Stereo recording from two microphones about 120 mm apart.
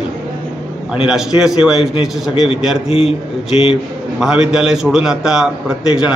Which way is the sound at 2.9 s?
55° left (ahead or behind).